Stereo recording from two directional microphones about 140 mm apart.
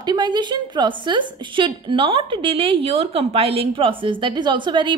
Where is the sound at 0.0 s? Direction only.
30° right (ahead or behind).